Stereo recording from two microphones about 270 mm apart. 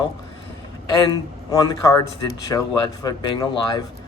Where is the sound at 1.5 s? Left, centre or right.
Centre.